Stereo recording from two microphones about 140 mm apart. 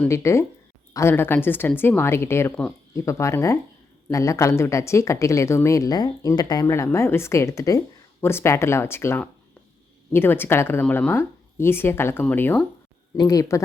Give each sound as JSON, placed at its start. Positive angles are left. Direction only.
{"t": 0.1, "sound": "speech", "side_deg": 20}
{"t": 13.1, "sound": "speech", "side_deg": 25}